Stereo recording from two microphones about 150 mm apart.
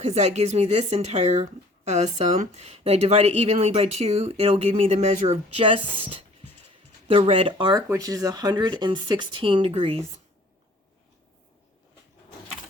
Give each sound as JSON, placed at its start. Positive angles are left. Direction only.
{"t": 0.0, "sound": "speech", "side_deg": -50}
{"t": 6.1, "sound": "music", "side_deg": -40}
{"t": 7.1, "sound": "speech", "side_deg": -35}